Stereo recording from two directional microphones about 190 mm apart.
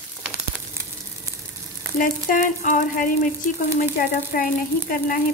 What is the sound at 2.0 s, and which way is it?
Stir, 45° left (ahead or behind).